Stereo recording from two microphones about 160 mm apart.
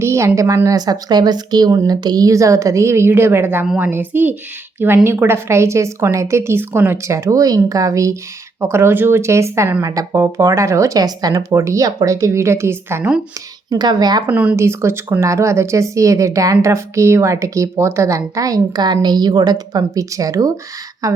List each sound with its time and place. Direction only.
0.0 s a woman's voice: 15° right (ahead or behind)
13.7 s speech: 25° right (ahead or behind)
14.3 s speech: 10° right (ahead or behind)